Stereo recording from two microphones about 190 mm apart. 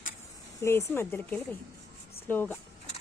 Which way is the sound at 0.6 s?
15° left (ahead or behind).